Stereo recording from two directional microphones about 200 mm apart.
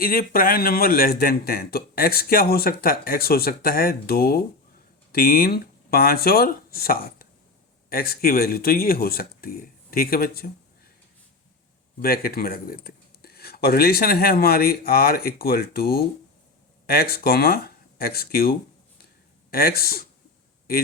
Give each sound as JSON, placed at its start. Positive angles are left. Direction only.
{"t": 0.0, "sound": "speech", "side_deg": 45}
{"t": 12.0, "sound": "speech", "side_deg": 50}